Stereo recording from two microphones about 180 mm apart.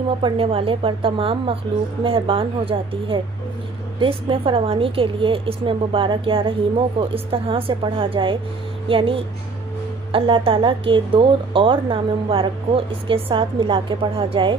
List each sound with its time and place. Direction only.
0.2 s a woman's voice: 30° right (ahead or behind)